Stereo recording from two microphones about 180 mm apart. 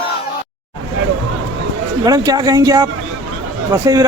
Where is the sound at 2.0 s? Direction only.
20° right (ahead or behind).